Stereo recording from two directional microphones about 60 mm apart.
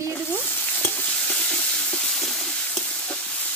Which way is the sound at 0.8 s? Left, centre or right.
Left.